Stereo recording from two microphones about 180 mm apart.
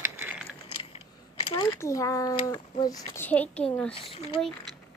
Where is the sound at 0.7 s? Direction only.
30° left (ahead or behind).